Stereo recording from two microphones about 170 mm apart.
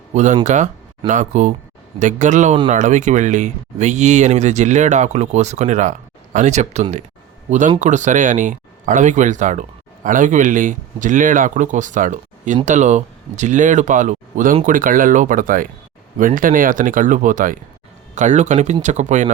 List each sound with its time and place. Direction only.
0.1 s speech: 45° right (ahead or behind)